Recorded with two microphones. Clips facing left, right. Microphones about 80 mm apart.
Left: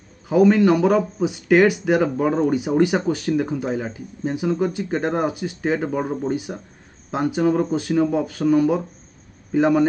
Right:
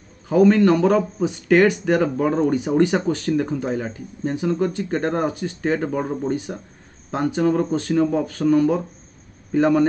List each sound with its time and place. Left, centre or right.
0.3 s a man's voice: centre